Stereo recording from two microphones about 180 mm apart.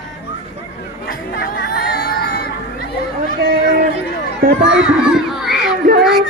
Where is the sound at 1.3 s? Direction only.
60° left (ahead or behind).